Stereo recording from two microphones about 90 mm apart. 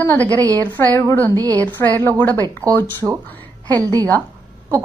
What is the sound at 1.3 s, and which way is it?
Speech, 45° right (ahead or behind).